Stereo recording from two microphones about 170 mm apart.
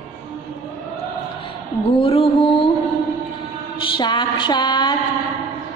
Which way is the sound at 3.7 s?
30° left (ahead or behind).